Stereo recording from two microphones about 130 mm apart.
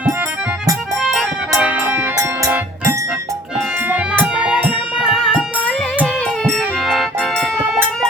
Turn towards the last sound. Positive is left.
turn(degrees=5)  # may be behind; listen again after turning